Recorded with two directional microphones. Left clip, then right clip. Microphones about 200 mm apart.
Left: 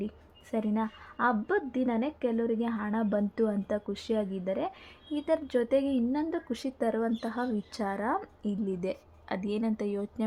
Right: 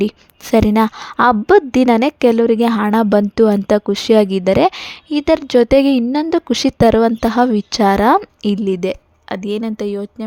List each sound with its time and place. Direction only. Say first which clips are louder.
0.5 s a woman's voice: right 19 dB; 55° right (ahead or behind); by 10.2 s 30° right (ahead or behind)